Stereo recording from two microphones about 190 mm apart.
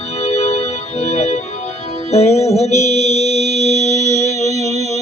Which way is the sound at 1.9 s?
35° left (ahead or behind).